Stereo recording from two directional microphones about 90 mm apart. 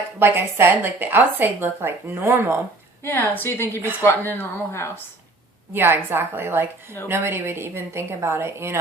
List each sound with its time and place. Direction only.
0.2 s a woman's voice: 25° right (ahead or behind)
3.0 s speech: 25° left (ahead or behind)
5.7 s a woman's voice: 25° right (ahead or behind)